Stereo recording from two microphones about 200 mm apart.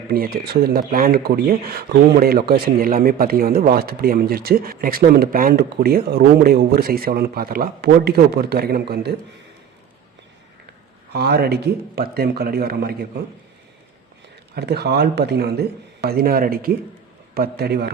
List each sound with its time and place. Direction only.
0.1 s speech: 50° right (ahead or behind)
11.1 s speech: 55° right (ahead or behind)
14.5 s speech: 55° right (ahead or behind)